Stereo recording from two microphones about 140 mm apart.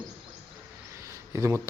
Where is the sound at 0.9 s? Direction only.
20° right (ahead or behind).